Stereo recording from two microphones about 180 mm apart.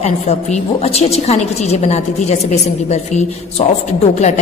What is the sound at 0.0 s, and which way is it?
A woman's voice, 35° left (ahead or behind).